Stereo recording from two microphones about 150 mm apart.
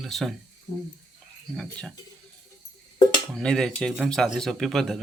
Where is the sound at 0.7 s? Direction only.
50° left (ahead or behind).